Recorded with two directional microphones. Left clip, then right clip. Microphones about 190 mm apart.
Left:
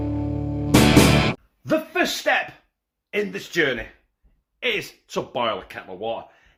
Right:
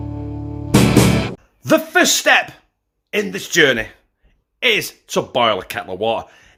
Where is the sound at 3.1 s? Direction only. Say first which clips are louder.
Right 6 dB; 35° right (ahead or behind); by 6.3 s 55° right (ahead or behind).